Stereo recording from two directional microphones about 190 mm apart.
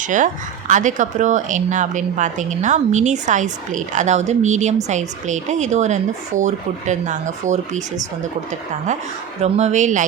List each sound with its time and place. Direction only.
0.0 s a woman's voice: 40° right (ahead or behind)
9.4 s a woman's voice: 35° right (ahead or behind)